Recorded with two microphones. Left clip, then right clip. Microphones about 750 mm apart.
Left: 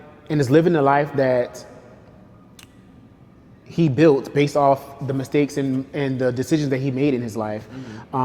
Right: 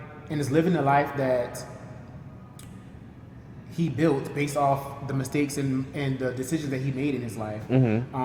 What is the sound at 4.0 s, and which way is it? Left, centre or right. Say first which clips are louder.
Speech: left 9 dB; left.